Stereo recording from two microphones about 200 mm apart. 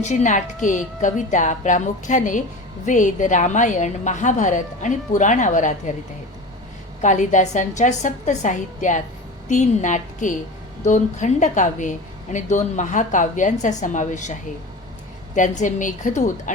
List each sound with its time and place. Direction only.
0.0 s a woman's voice: 35° left (ahead or behind)
7.0 s a woman's voice: 35° left (ahead or behind)
15.4 s a woman's voice: 40° left (ahead or behind)